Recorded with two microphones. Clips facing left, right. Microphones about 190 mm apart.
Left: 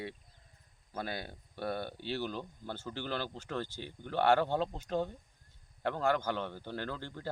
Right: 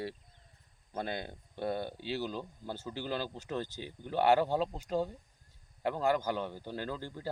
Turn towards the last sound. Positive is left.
turn(degrees=-10)  # may be behind; listen again after turning